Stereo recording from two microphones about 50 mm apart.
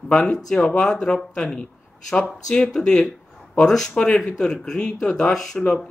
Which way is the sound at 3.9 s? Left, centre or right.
Left.